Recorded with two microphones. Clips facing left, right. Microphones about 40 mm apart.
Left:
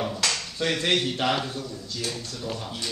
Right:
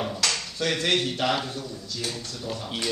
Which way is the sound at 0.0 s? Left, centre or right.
Centre.